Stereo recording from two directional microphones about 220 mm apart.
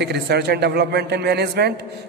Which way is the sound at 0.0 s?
50° right (ahead or behind).